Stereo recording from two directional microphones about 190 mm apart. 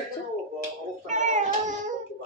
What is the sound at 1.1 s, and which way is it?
Child singing, 40° right (ahead or behind).